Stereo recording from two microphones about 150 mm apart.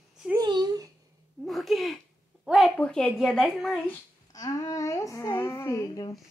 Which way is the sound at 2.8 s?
10° left (ahead or behind).